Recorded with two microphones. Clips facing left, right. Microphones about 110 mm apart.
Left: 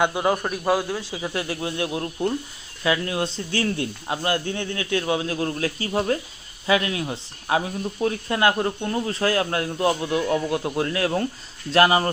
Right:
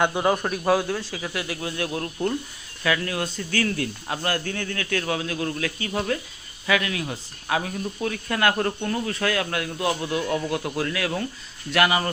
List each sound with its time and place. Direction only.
0.0 s a man's voice: 5° left (ahead or behind)
1.1 s a man's voice: 25° left (ahead or behind)